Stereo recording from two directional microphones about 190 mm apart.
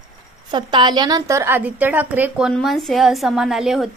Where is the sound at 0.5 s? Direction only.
25° right (ahead or behind).